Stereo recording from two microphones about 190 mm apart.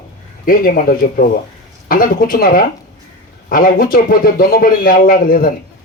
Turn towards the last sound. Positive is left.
turn(degrees=50)  # may be behind; listen again after turning